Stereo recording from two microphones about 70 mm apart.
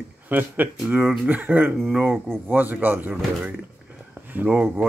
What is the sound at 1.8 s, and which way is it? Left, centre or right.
Speech, centre.